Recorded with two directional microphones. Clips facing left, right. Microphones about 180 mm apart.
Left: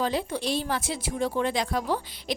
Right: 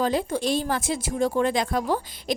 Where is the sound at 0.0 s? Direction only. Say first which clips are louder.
Right 4 dB; 45° right (ahead or behind).